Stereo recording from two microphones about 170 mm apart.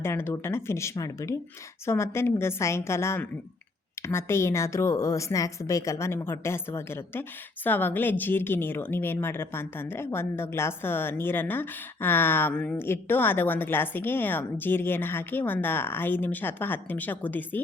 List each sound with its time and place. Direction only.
0.0 s a woman's voice: 15° left (ahead or behind)